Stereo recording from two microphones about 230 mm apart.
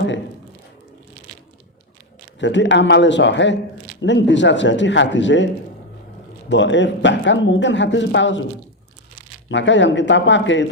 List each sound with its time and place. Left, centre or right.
2.4 s speech: left
6.5 s speech: left
9.5 s speech: left